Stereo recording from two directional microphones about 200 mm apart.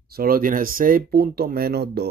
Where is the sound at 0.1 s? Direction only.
45° right (ahead or behind).